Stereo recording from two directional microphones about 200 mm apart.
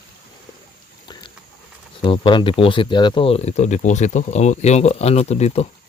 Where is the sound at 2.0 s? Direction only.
25° left (ahead or behind).